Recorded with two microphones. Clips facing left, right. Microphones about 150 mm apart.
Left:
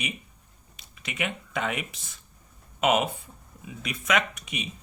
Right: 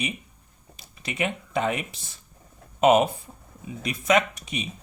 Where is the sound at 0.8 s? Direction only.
35° right (ahead or behind).